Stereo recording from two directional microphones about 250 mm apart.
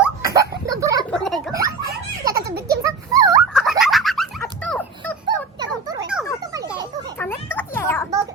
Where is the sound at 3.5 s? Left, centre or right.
Centre.